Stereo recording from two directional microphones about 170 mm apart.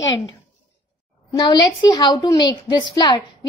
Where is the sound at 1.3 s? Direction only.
25° left (ahead or behind).